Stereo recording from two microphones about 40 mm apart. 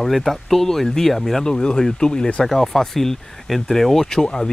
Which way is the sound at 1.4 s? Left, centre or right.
Centre.